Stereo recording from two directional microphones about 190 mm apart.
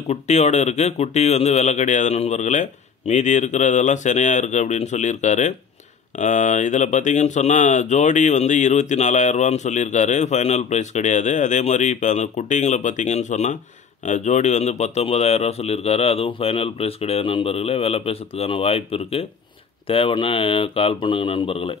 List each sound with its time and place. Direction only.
0.1 s speech: 35° left (ahead or behind)